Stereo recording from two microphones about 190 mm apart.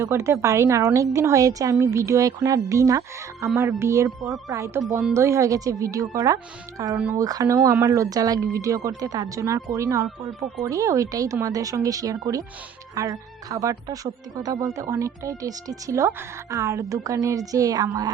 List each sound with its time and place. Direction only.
0.0 s speech: 15° right (ahead or behind)